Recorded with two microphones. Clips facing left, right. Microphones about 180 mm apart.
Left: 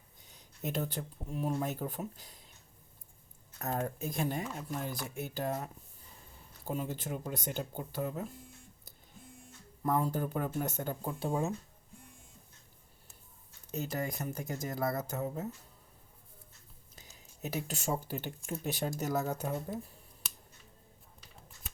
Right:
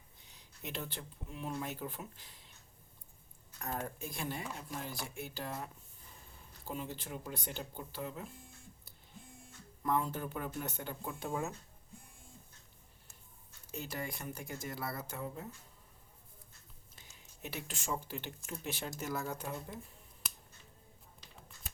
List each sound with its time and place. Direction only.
0.3 s speech: 45° left (ahead or behind)
3.6 s speech: 40° left (ahead or behind)
9.8 s speech: 40° left (ahead or behind)
13.7 s speech: 40° left (ahead or behind)
16.9 s speech: 40° left (ahead or behind)